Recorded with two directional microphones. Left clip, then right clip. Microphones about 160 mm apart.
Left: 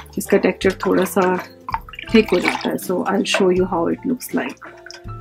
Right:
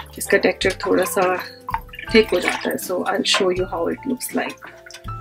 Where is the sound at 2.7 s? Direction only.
50° left (ahead or behind).